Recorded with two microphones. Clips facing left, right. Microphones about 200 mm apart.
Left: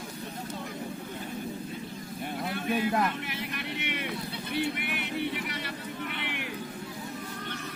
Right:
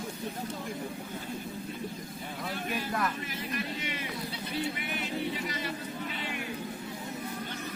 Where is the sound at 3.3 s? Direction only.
65° left (ahead or behind).